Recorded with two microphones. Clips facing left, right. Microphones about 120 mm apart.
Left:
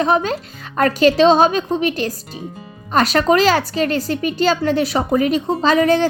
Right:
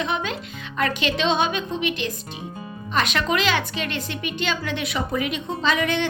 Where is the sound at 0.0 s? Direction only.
40° left (ahead or behind).